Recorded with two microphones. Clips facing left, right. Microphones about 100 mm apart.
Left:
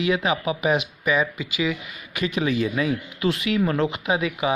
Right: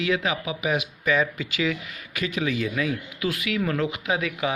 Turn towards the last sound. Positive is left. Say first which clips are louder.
# left 3 dB
turn(degrees=20)  # may be behind; listen again after turning